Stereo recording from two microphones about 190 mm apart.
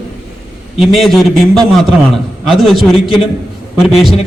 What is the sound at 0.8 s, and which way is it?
A man's voice, centre (ahead or behind).